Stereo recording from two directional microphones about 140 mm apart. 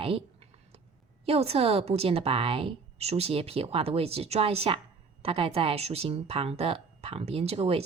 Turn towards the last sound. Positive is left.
turn(degrees=-45)  # may be behind; listen again after turning